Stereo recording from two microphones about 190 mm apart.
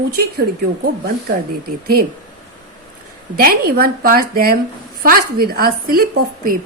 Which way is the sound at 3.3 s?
50° right (ahead or behind).